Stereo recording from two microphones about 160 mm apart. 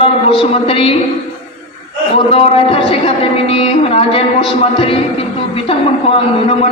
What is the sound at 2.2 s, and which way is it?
A man's voice, 35° left (ahead or behind).